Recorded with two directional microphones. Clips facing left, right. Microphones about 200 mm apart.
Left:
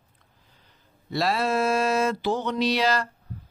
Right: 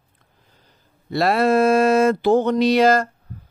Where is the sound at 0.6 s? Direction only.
55° right (ahead or behind).